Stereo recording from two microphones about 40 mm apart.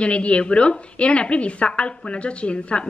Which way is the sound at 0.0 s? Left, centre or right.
Left.